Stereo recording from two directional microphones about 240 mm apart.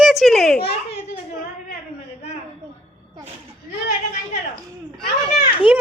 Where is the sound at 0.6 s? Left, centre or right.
Left.